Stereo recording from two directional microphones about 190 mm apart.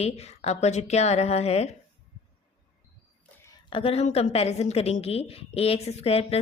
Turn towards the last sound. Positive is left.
turn(degrees=35)  # may be behind; listen again after turning